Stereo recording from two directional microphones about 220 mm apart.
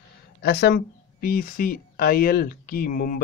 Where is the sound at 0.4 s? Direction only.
50° left (ahead or behind).